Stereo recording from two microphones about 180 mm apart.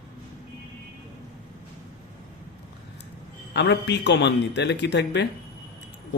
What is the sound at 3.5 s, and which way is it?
A man's voice, 75° left (ahead or behind).